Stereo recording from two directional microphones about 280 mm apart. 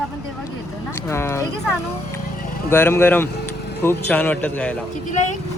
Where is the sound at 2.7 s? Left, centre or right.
Centre.